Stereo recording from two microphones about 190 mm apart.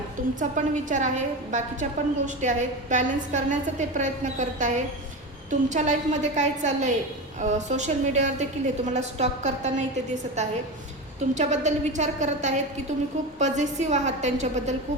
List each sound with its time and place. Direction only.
0.3 s a woman's voice: 40° right (ahead or behind)
11.3 s a woman's voice: 40° right (ahead or behind)